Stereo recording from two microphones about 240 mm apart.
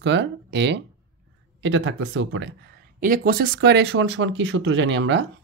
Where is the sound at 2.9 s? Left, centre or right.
Right.